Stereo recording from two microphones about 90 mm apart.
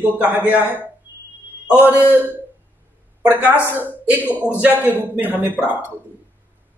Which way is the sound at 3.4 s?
20° right (ahead or behind).